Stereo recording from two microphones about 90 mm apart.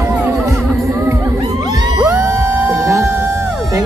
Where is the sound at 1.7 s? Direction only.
45° right (ahead or behind).